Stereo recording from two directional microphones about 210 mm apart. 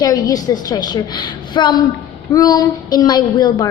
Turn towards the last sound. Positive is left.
turn(degrees=20)  # may be behind; listen again after turning